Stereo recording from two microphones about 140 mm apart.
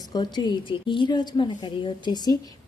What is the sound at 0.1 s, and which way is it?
A woman's voice, 30° left (ahead or behind).